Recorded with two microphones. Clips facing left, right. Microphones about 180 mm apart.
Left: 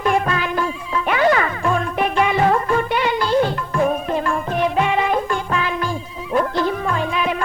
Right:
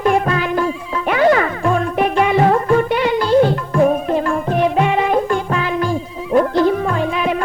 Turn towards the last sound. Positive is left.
turn(degrees=-40)  # may be behind; listen again after turning